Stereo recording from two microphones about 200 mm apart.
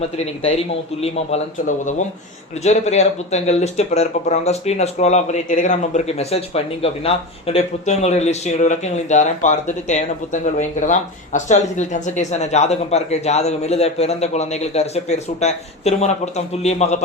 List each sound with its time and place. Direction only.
1.0 s speech: 35° left (ahead or behind)